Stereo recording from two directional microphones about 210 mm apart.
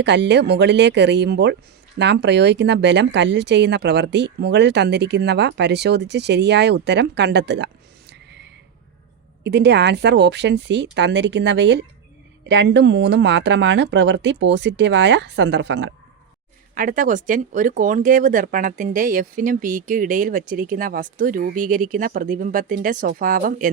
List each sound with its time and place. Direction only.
0.0 s speech: 55° right (ahead or behind)
9.4 s speech: 55° right (ahead or behind)
16.7 s speech: 40° right (ahead or behind)